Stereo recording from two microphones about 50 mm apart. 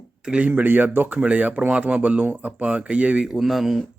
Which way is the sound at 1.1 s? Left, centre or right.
Right.